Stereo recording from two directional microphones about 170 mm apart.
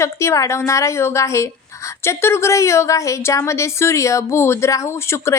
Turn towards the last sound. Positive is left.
turn(degrees=15)  # may be behind; listen again after turning